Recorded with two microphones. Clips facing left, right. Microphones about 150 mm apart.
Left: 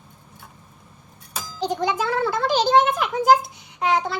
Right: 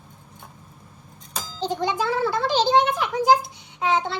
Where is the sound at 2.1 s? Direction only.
55° left (ahead or behind).